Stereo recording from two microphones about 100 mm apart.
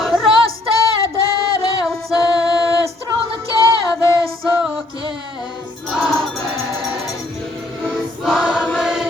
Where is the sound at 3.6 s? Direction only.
35° left (ahead or behind).